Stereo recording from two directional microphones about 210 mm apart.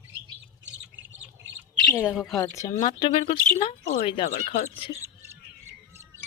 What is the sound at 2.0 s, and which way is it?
Speech, 5° right (ahead or behind).